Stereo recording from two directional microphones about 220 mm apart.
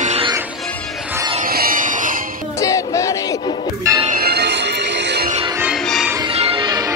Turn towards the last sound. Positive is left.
turn(degrees=-25)  # may be behind; listen again after turning